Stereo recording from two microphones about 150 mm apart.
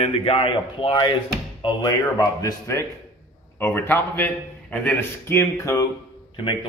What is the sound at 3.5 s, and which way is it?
A man's voice, 15° left (ahead or behind).